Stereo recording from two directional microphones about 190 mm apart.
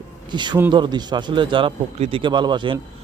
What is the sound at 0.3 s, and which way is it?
A man's voice, 25° right (ahead or behind).